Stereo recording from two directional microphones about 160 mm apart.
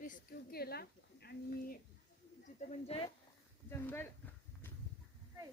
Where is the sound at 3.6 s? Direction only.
15° left (ahead or behind).